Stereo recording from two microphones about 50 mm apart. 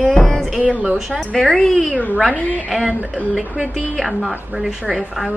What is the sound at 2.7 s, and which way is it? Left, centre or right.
Speech, centre.